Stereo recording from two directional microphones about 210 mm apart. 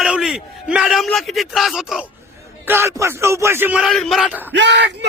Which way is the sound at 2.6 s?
10° right (ahead or behind).